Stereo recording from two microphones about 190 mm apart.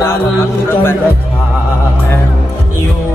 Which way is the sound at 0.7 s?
10° left (ahead or behind).